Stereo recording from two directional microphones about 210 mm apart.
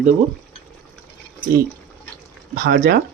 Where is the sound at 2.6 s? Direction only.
45° right (ahead or behind).